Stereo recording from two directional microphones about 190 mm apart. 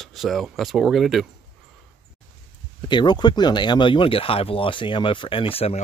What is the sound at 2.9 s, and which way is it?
Speech, 25° left (ahead or behind).